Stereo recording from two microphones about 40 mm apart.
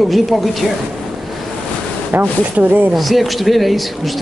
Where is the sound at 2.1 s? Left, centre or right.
Right.